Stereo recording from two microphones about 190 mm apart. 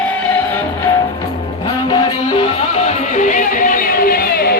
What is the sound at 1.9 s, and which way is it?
Music, 25° left (ahead or behind).